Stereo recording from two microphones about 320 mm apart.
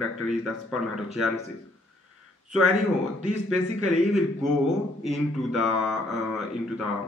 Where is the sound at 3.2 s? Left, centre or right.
Right.